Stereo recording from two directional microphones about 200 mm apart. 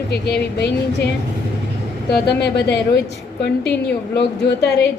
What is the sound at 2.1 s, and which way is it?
Speech, 55° left (ahead or behind).